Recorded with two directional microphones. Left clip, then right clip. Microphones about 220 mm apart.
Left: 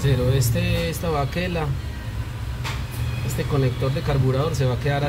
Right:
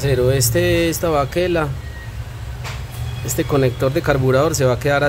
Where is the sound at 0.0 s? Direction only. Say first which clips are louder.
Right 7 dB; 50° right (ahead or behind); by 1.7 s 30° right (ahead or behind).